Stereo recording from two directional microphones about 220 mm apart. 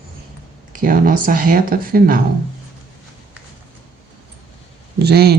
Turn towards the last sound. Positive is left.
turn(degrees=-45)  # may be behind; listen again after turning